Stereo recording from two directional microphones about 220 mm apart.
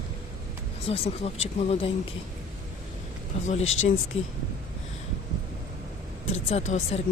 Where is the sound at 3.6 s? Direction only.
65° left (ahead or behind).